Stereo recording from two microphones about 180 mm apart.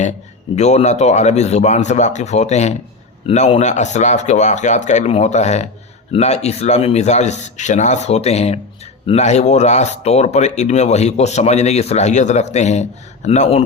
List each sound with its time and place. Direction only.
0.5 s speech: 40° left (ahead or behind)